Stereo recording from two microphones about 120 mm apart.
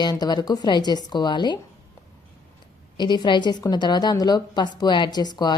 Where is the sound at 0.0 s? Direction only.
35° left (ahead or behind).